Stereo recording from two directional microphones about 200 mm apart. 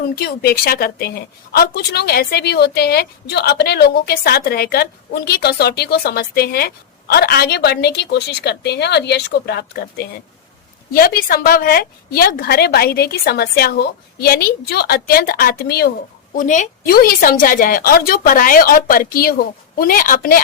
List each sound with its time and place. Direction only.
0.2 s a woman's voice: 50° left (ahead or behind)